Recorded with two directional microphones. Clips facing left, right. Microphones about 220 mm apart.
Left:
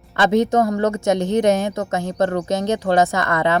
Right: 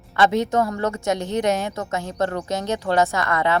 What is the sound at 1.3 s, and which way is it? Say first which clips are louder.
Speech: left 5 dB; 50° left (ahead or behind).